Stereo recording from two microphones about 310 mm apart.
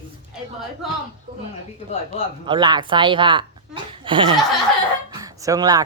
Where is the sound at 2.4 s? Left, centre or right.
Centre.